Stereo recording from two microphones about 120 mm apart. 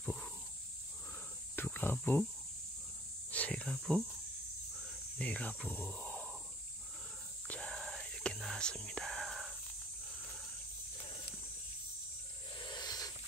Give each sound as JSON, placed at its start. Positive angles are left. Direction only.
{"t": 0.0, "sound": "snake", "side_deg": 10}
{"t": 1.6, "sound": "cricket", "side_deg": 15}
{"t": 3.3, "sound": "speech", "side_deg": 10}
{"t": 5.2, "sound": "speech", "side_deg": 10}
{"t": 7.4, "sound": "whispering", "side_deg": 10}
{"t": 12.5, "sound": "a sound", "side_deg": 35}